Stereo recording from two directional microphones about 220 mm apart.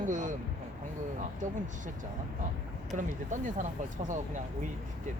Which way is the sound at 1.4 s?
35° right (ahead or behind).